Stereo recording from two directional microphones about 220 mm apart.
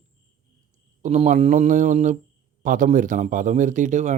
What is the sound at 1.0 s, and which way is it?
A man's voice, 30° right (ahead or behind).